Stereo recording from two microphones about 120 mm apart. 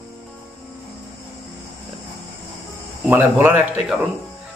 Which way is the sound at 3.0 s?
15° right (ahead or behind).